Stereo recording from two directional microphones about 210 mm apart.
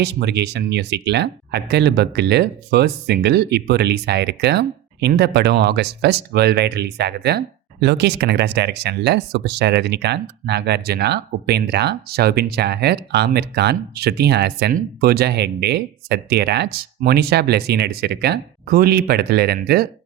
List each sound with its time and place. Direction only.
0.0 s speech: 55° right (ahead or behind)